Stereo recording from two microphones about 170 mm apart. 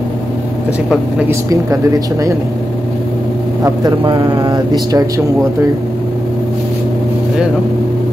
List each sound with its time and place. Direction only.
3.6 s speech: 25° right (ahead or behind)